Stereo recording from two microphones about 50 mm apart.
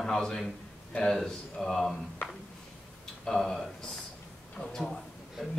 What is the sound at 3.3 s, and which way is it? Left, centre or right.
A man's voice, centre.